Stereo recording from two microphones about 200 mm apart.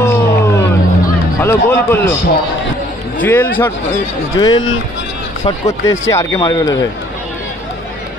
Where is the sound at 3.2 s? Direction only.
10° left (ahead or behind).